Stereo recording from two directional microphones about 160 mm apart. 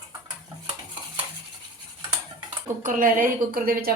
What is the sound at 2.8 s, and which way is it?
A woman's voice, 55° right (ahead or behind).